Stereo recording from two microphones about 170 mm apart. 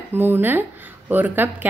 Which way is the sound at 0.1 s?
10° right (ahead or behind).